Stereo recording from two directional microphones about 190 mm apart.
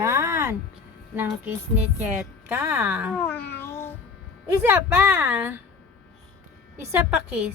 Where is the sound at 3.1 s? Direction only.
10° left (ahead or behind).